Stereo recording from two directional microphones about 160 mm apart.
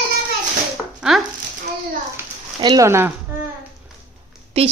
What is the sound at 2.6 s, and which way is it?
Speech, 20° right (ahead or behind).